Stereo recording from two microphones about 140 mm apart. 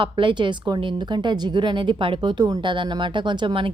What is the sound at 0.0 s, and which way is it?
A woman's voice, 35° right (ahead or behind).